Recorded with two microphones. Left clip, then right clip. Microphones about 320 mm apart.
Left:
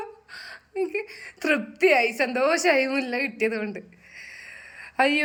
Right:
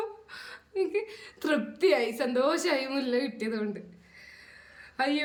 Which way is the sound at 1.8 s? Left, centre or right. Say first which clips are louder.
Left 6 dB; centre.